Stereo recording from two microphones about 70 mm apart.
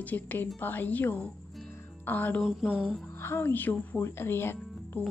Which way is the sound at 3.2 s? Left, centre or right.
Left.